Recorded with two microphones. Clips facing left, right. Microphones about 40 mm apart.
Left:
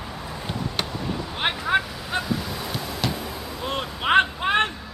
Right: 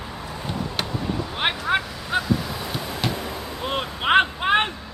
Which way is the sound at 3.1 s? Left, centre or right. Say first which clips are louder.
Right 2 dB; right.